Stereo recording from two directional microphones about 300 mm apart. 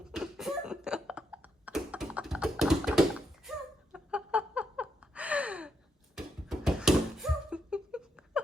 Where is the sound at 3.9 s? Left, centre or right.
Centre.